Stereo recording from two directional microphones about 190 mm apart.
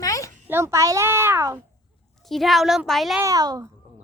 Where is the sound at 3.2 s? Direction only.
20° right (ahead or behind).